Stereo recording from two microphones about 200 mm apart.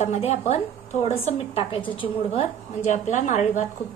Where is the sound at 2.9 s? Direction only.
40° left (ahead or behind).